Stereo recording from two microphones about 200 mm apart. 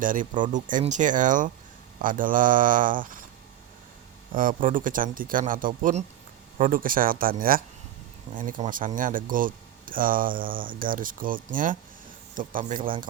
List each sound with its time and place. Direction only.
0.0 s speech: 40° right (ahead or behind)
4.4 s speech: 45° right (ahead or behind)